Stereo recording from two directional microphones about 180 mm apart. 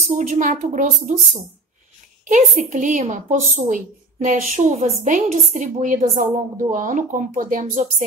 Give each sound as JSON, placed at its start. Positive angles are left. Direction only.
{"t": 0.3, "sound": "a woman's voice", "side_deg": -45}